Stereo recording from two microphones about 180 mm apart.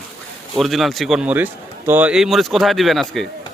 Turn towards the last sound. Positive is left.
turn(degrees=0)  # may be behind; listen again after turning